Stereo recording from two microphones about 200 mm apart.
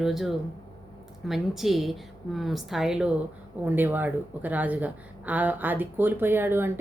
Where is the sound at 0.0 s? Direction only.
Centre (ahead or behind).